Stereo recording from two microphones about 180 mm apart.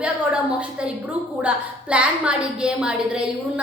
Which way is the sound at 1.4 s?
5° right (ahead or behind).